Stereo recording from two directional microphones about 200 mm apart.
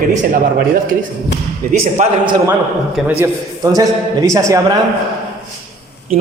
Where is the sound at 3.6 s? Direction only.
20° right (ahead or behind).